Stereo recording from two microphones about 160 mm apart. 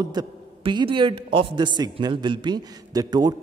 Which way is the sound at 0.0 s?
25° right (ahead or behind).